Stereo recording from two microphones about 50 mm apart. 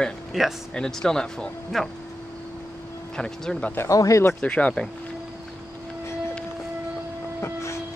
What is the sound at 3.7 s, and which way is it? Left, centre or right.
Speech, left.